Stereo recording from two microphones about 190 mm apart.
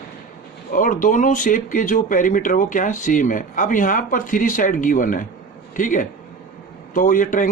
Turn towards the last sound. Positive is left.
turn(degrees=45)  # may be behind; listen again after turning